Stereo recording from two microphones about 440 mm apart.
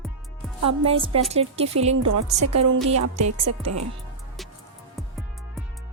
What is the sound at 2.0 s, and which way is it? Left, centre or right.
A woman's voice, right.